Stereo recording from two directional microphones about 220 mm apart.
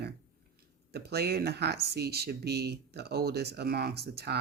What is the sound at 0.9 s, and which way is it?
Speech, 45° right (ahead or behind).